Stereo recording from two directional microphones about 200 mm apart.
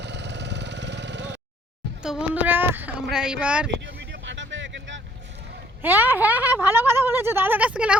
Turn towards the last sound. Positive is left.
turn(degrees=-5)  # may be behind; listen again after turning